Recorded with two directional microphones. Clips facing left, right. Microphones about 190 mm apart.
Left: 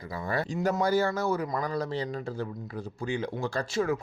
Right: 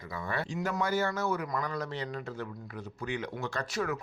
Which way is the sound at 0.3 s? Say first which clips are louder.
Left 6 dB; 40° left (ahead or behind).